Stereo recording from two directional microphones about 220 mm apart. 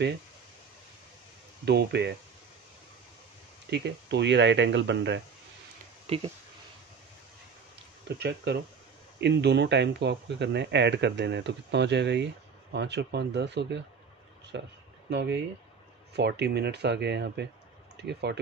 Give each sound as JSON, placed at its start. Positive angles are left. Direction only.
{"t": 1.7, "sound": "speech", "side_deg": -50}
{"t": 3.7, "sound": "speech", "side_deg": -50}
{"t": 6.0, "sound": "speech", "side_deg": -25}
{"t": 8.2, "sound": "speech", "side_deg": -50}